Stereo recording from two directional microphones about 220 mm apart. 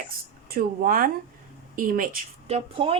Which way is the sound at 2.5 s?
25° right (ahead or behind).